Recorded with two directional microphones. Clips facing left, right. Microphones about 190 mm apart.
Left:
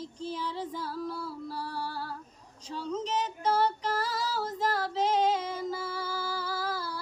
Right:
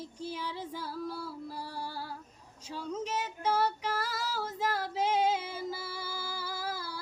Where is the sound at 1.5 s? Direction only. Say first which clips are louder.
Left 4 dB; 15° right (ahead or behind).